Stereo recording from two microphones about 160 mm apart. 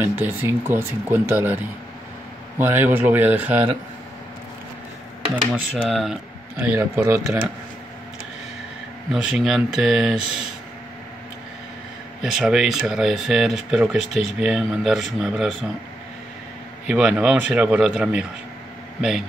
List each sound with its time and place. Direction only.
0.0 s speech: 15° right (ahead or behind)
2.6 s speech: 10° right (ahead or behind)
5.3 s speech: 5° right (ahead or behind)
9.1 s speech: 5° right (ahead or behind)
12.2 s speech: 5° right (ahead or behind)
16.8 s speech: 5° right (ahead or behind)